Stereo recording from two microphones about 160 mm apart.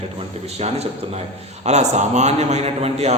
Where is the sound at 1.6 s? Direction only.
45° right (ahead or behind).